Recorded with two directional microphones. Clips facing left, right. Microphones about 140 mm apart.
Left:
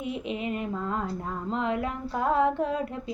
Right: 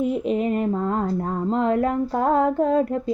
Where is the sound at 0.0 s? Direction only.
40° right (ahead or behind).